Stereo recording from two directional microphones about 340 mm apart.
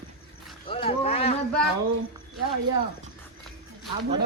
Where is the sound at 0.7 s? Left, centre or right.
Centre.